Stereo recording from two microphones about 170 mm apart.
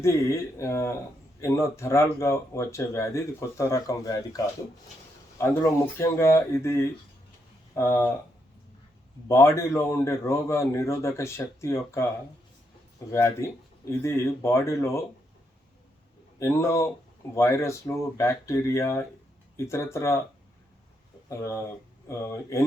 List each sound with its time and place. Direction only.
0.0 s speech: 15° left (ahead or behind)
9.3 s speech: 15° left (ahead or behind)
13.1 s speech: 15° left (ahead or behind)
16.4 s speech: 15° left (ahead or behind)
21.2 s speech: 15° left (ahead or behind)